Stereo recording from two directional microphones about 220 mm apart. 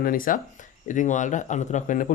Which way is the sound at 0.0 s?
40° left (ahead or behind).